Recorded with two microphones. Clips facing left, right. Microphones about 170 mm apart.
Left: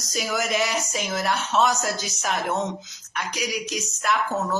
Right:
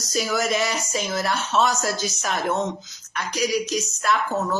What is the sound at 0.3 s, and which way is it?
Speech, 15° left (ahead or behind).